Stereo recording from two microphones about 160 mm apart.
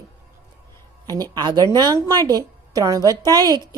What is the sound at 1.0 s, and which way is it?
Speech, 25° right (ahead or behind).